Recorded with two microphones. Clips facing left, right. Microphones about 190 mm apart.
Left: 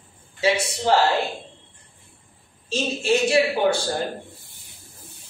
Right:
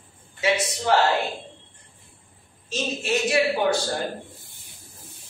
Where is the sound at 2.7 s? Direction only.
30° left (ahead or behind).